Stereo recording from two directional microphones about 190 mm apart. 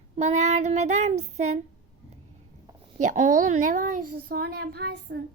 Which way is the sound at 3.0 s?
40° right (ahead or behind).